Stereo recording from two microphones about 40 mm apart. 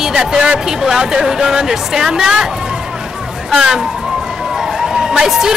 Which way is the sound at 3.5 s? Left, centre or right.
Centre.